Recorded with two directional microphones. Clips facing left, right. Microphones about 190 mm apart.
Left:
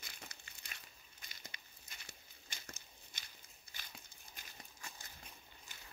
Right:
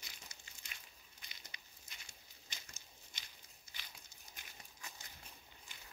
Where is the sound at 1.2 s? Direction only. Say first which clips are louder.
Left 3 dB; 50° left (ahead or behind).